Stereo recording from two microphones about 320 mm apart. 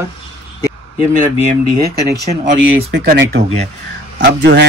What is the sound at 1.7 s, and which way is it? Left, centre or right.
A man's voice, right.